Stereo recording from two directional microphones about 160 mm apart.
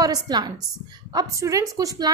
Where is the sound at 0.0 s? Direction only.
25° right (ahead or behind).